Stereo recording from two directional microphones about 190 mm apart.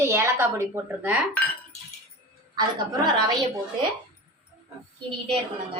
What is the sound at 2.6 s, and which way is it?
Speech, 20° right (ahead or behind).